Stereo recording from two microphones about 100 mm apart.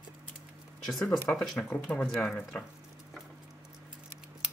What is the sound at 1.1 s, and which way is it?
Speech, centre (ahead or behind).